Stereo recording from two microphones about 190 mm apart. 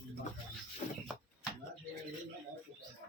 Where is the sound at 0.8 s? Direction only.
40° left (ahead or behind).